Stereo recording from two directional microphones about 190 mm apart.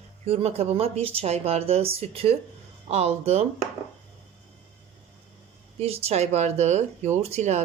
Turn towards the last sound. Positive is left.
turn(degrees=-35)  # may be behind; listen again after turning